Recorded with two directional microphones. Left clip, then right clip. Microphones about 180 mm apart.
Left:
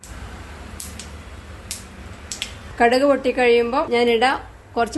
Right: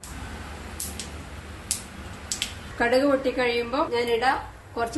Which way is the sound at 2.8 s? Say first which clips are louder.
Left 6 dB; 60° left (ahead or behind).